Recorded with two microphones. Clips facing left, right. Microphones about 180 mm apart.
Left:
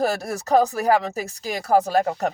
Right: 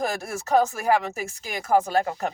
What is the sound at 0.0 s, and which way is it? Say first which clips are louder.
Speech: left 5 dB; 35° left (ahead or behind).